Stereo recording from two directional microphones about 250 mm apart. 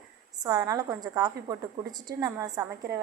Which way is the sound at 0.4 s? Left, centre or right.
Centre.